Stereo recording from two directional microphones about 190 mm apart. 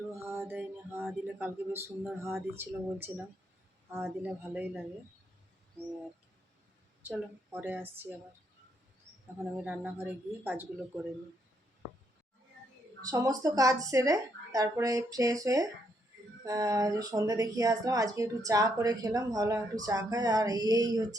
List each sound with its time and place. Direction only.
0.2 s music: 15° right (ahead or behind)
1.0 s speech: 10° right (ahead or behind)
7.5 s speech: 10° right (ahead or behind)
9.6 s speech: 10° right (ahead or behind)
13.0 s speech: 20° right (ahead or behind)